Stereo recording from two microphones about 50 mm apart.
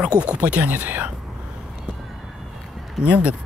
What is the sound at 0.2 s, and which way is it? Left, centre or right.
Speech, right.